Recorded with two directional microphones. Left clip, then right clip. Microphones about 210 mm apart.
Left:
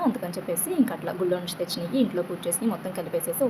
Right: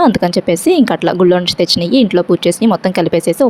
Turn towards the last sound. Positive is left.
turn(degrees=-40)  # may be behind; listen again after turning